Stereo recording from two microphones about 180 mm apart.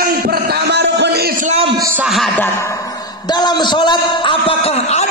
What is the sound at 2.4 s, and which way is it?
A man's voice, 15° left (ahead or behind).